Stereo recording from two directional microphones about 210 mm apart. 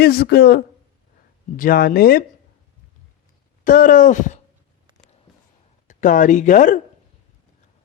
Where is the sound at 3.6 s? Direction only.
40° left (ahead or behind).